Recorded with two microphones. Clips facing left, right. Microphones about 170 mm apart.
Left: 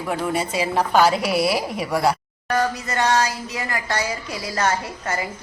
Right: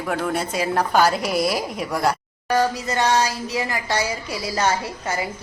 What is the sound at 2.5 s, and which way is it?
Music, 15° right (ahead or behind).